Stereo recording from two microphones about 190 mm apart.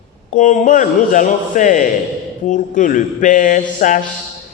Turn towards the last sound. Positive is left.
turn(degrees=45)  # may be behind; listen again after turning